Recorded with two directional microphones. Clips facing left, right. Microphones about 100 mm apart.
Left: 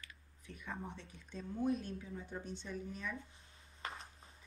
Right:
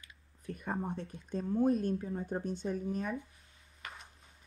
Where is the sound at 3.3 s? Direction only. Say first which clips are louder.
Left 1 dB; 30° left (ahead or behind).